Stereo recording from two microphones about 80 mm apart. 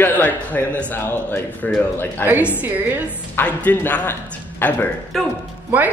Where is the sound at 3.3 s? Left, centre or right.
Left.